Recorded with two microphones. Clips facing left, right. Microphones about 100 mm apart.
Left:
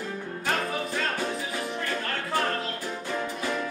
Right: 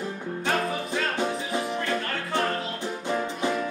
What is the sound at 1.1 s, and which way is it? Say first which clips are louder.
Music: right 3 dB; 20° right (ahead or behind).